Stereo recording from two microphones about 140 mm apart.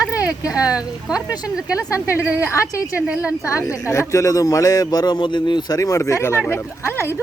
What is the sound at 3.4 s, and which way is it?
A man's voice, 20° left (ahead or behind).